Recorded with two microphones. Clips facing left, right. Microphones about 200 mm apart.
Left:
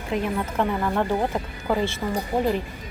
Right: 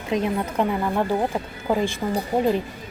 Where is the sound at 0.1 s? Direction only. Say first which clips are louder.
Right 2 dB; 20° right (ahead or behind).